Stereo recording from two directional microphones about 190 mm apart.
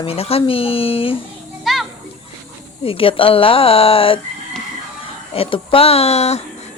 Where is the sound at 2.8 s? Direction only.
30° left (ahead or behind).